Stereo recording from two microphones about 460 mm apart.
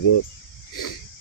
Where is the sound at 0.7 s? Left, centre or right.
Left.